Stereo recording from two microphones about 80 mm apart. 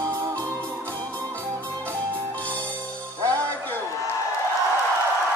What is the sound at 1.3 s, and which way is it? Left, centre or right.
Music, right.